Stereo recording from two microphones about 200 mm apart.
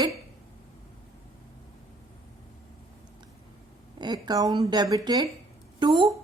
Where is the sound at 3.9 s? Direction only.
20° right (ahead or behind).